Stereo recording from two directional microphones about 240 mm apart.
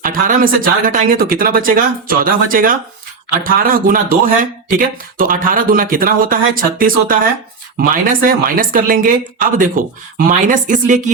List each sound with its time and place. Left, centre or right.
0.0 s speech: right